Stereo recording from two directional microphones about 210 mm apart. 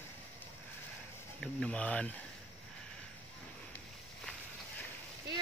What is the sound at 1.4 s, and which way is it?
Speech, 5° left (ahead or behind).